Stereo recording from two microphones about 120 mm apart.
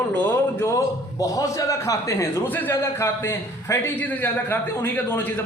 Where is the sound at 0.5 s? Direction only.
25° left (ahead or behind).